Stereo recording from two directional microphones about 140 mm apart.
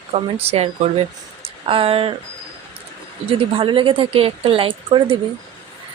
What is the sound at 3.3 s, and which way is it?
Speech, 40° right (ahead or behind).